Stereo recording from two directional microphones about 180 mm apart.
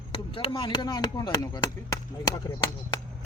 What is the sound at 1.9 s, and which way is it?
Speech, 20° left (ahead or behind).